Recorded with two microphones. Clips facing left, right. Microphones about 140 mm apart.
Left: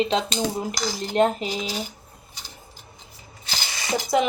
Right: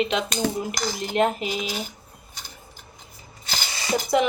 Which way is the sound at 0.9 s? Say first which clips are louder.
Left 2 dB; 35° left (ahead or behind).